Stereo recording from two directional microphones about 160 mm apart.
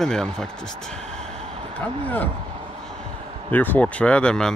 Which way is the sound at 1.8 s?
10° left (ahead or behind).